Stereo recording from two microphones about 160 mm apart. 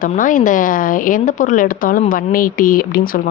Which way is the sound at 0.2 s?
55° left (ahead or behind).